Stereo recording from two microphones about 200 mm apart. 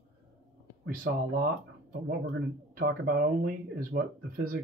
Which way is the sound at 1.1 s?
50° right (ahead or behind).